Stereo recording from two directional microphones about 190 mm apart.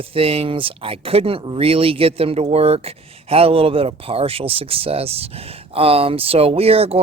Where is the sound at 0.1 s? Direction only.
30° right (ahead or behind).